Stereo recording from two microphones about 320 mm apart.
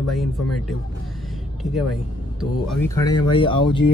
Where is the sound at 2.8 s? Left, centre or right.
Centre.